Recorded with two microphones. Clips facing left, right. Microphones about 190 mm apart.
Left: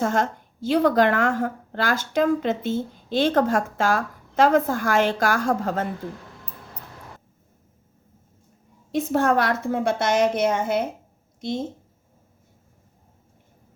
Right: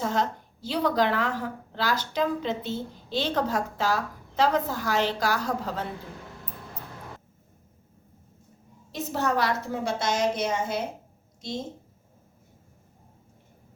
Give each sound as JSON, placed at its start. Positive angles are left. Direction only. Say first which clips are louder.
{"t": 0.0, "sound": "a woman's voice", "louder": "left 4 dB", "side_deg": 50}
{"t": 8.9, "sound": "a woman's voice", "louder": "left 7 dB", "side_deg": 50}